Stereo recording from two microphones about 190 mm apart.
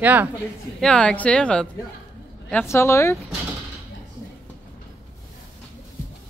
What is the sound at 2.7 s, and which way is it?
Speech, 15° left (ahead or behind).